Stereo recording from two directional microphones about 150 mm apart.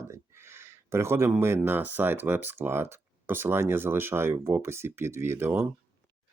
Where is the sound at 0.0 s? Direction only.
15° right (ahead or behind).